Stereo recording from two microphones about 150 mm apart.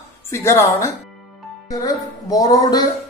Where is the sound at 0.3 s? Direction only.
20° left (ahead or behind).